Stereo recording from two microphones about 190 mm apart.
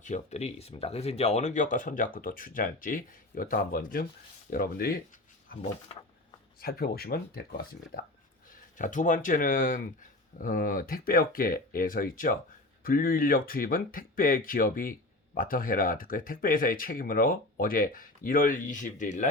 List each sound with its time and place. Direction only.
0.0 s speech: 35° left (ahead or behind)
6.6 s speech: 55° left (ahead or behind)
8.8 s speech: 40° left (ahead or behind)